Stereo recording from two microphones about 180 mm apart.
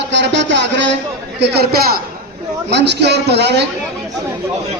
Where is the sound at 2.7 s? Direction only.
70° right (ahead or behind).